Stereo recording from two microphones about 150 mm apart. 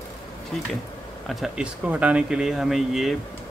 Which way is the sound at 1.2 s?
Centre (ahead or behind).